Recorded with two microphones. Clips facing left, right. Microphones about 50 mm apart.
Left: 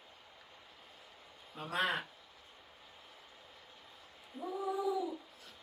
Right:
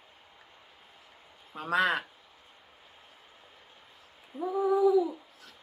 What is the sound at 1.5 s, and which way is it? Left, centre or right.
Speech, right.